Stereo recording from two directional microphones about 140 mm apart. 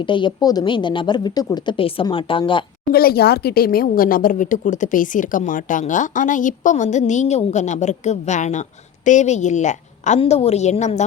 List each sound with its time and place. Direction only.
0.0 s a woman's voice: 35° left (ahead or behind)
2.9 s a woman's voice: 90° left; by 10.2 s 60° left (ahead or behind)
10.2 s a woman's voice: 45° left (ahead or behind)